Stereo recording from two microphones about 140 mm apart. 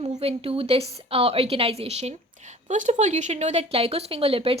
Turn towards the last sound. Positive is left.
turn(degrees=-40)  # may be behind; listen again after turning